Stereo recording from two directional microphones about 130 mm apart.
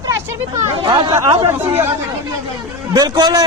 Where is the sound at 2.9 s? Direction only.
30° right (ahead or behind).